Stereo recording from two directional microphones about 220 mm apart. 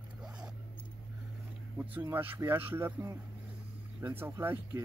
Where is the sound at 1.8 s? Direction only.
10° right (ahead or behind).